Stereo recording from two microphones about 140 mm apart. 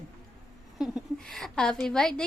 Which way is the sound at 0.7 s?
Centre (ahead or behind).